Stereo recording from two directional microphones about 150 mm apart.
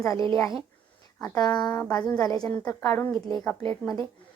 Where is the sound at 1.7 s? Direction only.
15° left (ahead or behind).